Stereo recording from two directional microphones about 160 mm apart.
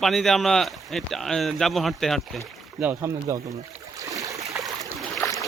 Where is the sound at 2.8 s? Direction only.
15° right (ahead or behind).